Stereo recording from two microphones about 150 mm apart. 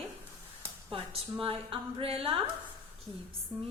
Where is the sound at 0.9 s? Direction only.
40° right (ahead or behind).